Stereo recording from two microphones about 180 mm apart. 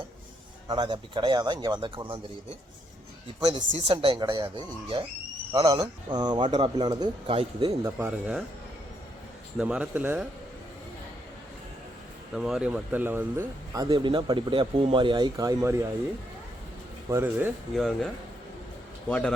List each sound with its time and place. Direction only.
0.7 s speech: 25° right (ahead or behind)
3.4 s speech: 40° right (ahead or behind)
7.9 s speech: 10° right (ahead or behind)
9.6 s speech: 5° right (ahead or behind)
12.3 s speech: 5° right (ahead or behind); by 15.7 s 20° right (ahead or behind)
17.1 s speech: 15° right (ahead or behind)
17.7 s a man's voice: centre (ahead or behind)